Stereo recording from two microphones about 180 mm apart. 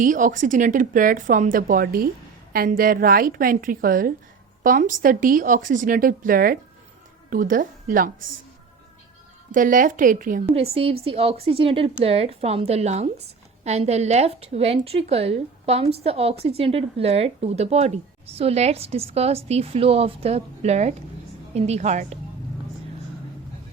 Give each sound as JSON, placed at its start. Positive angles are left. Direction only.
{"t": 0.0, "sound": "a woman's voice", "side_deg": -45}
{"t": 9.5, "sound": "speech", "side_deg": -50}
{"t": 10.5, "sound": "a woman's voice", "side_deg": -35}